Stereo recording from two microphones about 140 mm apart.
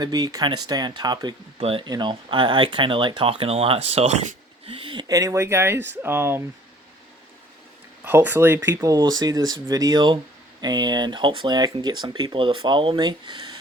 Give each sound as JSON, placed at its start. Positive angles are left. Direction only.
{"t": 0.0, "sound": "speech", "side_deg": -30}
{"t": 1.5, "sound": "speech", "side_deg": -45}
{"t": 1.8, "sound": "speech", "side_deg": -30}
{"t": 4.7, "sound": "speech", "side_deg": -40}
{"t": 8.0, "sound": "speech", "side_deg": -15}